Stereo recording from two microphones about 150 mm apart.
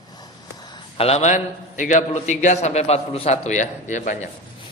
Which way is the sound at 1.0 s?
45° left (ahead or behind).